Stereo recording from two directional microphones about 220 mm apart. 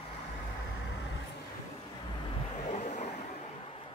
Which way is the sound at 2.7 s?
35° left (ahead or behind).